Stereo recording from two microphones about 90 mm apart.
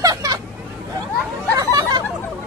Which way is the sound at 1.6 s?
40° right (ahead or behind).